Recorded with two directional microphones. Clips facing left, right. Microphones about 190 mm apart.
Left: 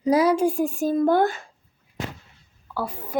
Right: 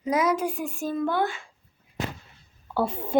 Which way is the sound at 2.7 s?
25° right (ahead or behind).